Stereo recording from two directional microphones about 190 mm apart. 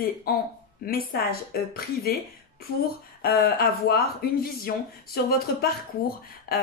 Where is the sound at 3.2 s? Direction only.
55° left (ahead or behind).